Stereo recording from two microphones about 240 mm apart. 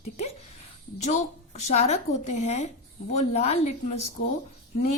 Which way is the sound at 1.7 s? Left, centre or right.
Left.